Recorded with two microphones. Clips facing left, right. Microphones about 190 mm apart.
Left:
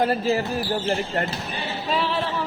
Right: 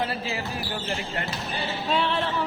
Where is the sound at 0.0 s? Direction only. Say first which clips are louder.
Left 8 dB; 45° left (ahead or behind).